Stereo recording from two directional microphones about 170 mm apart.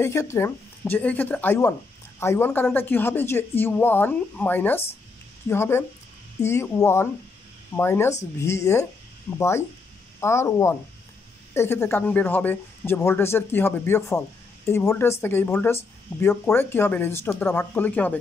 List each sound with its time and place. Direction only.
0.0 s speech: 15° left (ahead or behind)